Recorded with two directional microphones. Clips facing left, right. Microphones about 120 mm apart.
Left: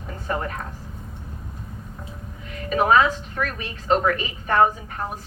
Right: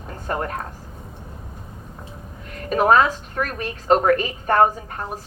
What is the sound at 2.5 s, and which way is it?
A woman's voice, 45° right (ahead or behind).